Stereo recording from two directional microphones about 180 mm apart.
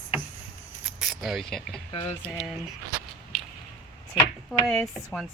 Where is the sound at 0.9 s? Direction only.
Centre (ahead or behind).